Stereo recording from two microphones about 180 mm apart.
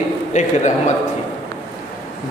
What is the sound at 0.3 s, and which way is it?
Speech, 40° left (ahead or behind).